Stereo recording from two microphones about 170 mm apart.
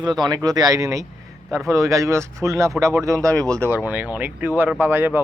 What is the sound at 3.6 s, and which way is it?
Speech, 10° right (ahead or behind).